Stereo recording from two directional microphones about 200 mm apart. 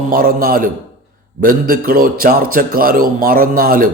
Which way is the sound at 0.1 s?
45° right (ahead or behind).